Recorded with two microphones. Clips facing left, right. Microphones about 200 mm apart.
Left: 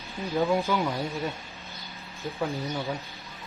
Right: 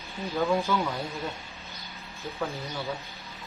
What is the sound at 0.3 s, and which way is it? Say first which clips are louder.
Speech: left 1 dB; 15° left (ahead or behind).